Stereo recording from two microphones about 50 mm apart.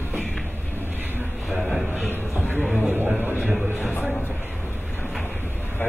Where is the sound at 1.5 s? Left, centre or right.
Centre.